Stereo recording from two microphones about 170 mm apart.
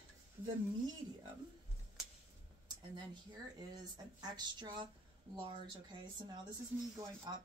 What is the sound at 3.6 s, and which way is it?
Speech, 25° right (ahead or behind).